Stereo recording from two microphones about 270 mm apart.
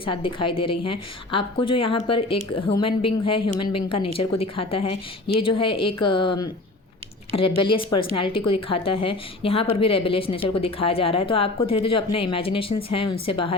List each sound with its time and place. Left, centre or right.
0.0 s a woman's voice: centre